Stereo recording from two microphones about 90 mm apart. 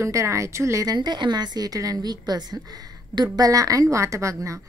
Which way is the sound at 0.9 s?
55° right (ahead or behind).